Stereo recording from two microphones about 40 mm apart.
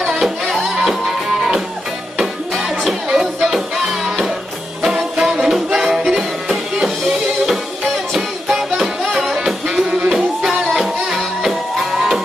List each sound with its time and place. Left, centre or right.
0.0 s music: centre
4.8 s music: centre
9.8 s music: right
10.1 s music: centre